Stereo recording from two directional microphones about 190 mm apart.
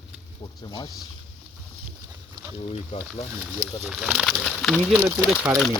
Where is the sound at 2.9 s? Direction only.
30° left (ahead or behind).